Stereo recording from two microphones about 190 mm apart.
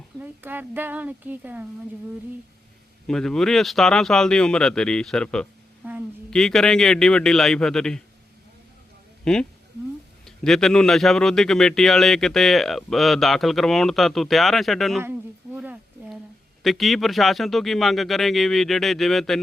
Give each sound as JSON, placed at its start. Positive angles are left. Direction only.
{"t": 0.2, "sound": "speech", "side_deg": -10}
{"t": 3.1, "sound": "speech", "side_deg": 0}
{"t": 5.8, "sound": "a sound", "side_deg": -10}
{"t": 6.3, "sound": "speech", "side_deg": 0}
{"t": 9.2, "sound": "speech", "side_deg": 5}
{"t": 15.0, "sound": "a sound", "side_deg": -10}
{"t": 16.6, "sound": "speech", "side_deg": 0}